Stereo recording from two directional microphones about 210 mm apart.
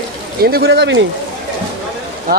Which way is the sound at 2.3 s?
45° right (ahead or behind).